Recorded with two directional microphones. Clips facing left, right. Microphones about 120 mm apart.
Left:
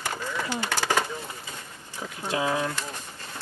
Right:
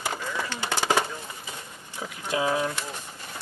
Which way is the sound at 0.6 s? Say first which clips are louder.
Right 2 dB; 20° right (ahead or behind).